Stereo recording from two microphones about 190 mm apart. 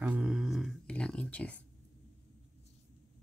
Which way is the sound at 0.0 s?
5° right (ahead or behind).